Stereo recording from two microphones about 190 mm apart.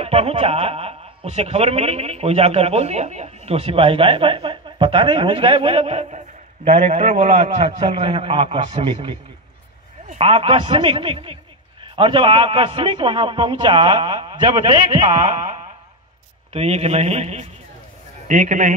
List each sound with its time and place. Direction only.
0.0 s a man's voice: 35° right (ahead or behind)
14.9 s speech: 40° right (ahead or behind)